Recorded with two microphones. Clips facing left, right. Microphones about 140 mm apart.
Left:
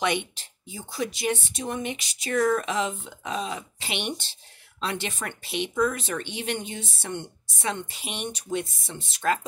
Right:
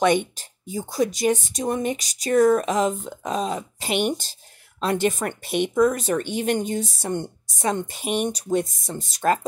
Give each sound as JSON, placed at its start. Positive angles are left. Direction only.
{"t": 0.0, "sound": "speech", "side_deg": -45}